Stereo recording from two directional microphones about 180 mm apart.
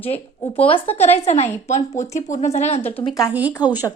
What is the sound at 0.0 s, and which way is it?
Speech, 35° left (ahead or behind).